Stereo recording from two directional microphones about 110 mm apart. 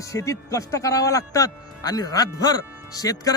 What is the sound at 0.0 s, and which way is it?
Speech, 30° left (ahead or behind).